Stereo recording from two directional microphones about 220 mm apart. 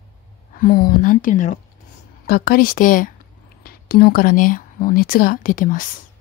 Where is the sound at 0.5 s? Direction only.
40° left (ahead or behind).